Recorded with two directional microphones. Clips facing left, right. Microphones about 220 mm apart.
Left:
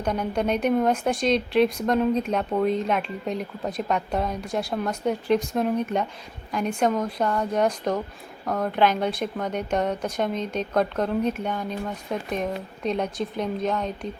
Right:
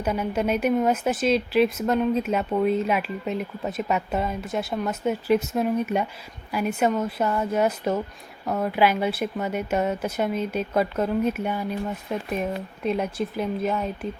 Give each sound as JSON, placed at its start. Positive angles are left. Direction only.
{"t": 0.0, "sound": "a woman's voice", "side_deg": -5}